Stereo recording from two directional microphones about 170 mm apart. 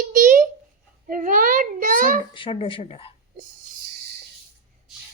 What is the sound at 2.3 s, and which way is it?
Speech, 30° left (ahead or behind).